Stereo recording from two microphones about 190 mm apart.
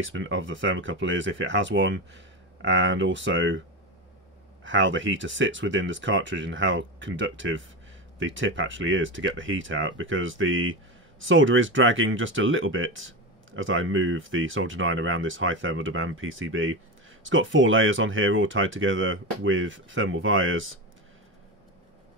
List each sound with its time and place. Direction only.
0.0 s speech: 85° right
4.6 s speech: 75° right (ahead or behind)
8.2 s speech: 90° right